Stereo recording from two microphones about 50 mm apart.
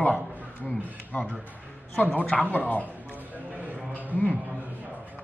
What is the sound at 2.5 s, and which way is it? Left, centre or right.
Speech, left.